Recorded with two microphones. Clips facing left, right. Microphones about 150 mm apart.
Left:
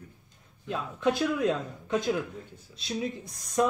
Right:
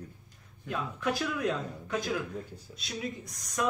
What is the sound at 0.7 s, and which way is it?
Speech, 25° left (ahead or behind).